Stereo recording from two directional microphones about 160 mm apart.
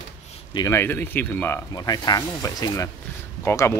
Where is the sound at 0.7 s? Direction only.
15° left (ahead or behind).